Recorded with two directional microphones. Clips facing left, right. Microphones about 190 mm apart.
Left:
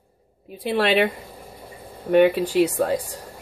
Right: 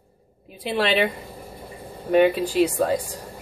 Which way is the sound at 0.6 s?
50° left (ahead or behind).